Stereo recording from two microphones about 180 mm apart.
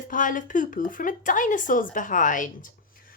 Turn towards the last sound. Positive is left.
turn(degrees=45)  # may be behind; listen again after turning